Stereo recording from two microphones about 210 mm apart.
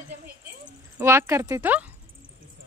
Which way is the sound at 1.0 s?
10° right (ahead or behind).